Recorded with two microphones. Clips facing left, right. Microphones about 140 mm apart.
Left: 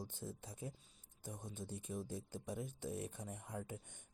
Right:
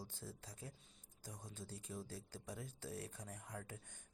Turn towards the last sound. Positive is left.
turn(degrees=20)  # may be behind; listen again after turning